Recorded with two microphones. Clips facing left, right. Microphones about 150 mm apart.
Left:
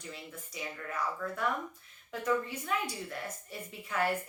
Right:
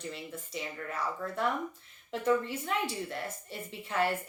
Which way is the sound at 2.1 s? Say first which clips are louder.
Right 3 dB; 25° right (ahead or behind).